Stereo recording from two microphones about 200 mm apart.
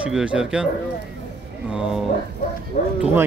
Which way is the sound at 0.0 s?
5° right (ahead or behind).